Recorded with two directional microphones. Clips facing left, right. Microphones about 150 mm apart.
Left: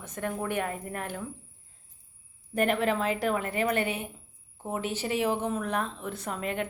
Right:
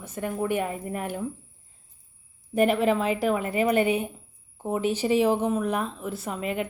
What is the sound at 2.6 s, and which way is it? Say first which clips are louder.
Speech: right 4 dB; 5° right (ahead or behind).